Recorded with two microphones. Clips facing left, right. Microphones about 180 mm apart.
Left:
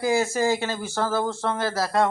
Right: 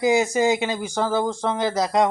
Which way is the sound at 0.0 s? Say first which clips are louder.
Right 3 dB; 20° right (ahead or behind).